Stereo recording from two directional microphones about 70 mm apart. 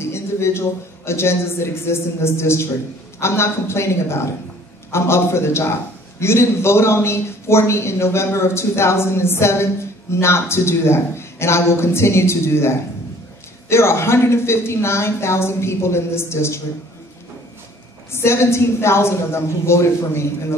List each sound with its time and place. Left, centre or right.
0.0 s a man's voice: left
18.1 s a man's voice: left